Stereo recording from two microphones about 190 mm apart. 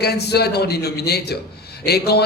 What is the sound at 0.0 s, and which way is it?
A man's voice, 60° left (ahead or behind).